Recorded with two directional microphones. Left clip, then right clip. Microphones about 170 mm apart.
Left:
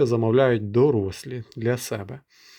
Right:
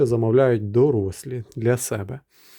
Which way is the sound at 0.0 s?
30° right (ahead or behind).